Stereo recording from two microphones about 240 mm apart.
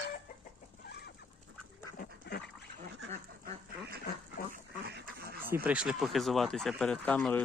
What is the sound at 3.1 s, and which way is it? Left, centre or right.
Duck, right.